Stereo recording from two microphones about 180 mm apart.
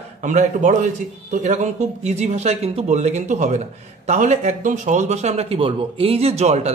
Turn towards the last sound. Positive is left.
turn(degrees=-35)  # may be behind; listen again after turning